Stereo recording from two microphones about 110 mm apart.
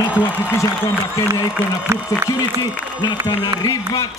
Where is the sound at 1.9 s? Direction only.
25° right (ahead or behind).